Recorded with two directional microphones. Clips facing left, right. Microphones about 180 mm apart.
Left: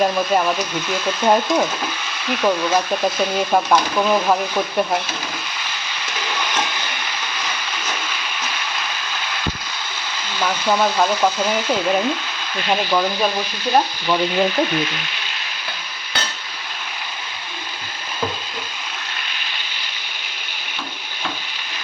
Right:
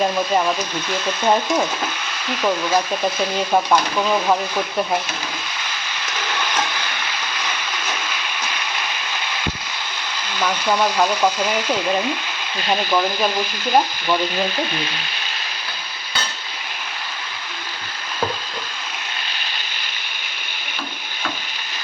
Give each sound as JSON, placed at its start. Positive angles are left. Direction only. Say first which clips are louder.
{"t": 0.0, "sound": "speech", "louder": "left 1 dB", "side_deg": 0}
{"t": 10.3, "sound": "speech", "louder": "left 1 dB", "side_deg": 5}